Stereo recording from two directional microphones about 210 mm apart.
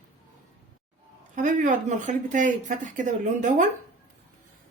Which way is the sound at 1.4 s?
35° right (ahead or behind).